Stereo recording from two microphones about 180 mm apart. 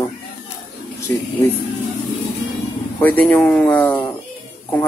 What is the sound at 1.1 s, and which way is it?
Speech, 15° left (ahead or behind).